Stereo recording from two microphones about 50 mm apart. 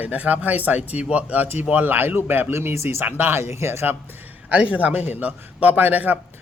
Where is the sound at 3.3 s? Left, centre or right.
Right.